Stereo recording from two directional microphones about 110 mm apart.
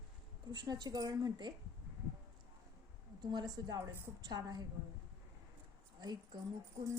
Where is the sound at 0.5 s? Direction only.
40° right (ahead or behind).